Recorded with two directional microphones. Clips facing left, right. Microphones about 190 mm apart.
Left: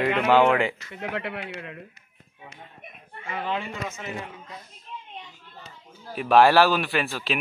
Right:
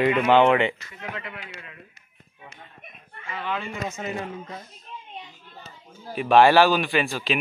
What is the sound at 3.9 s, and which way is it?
Speech, 35° right (ahead or behind).